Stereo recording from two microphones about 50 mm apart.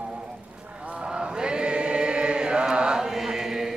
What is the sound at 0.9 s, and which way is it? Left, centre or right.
Chant, centre.